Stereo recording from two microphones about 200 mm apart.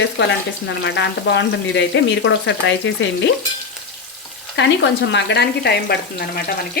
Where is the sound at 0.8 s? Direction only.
60° left (ahead or behind).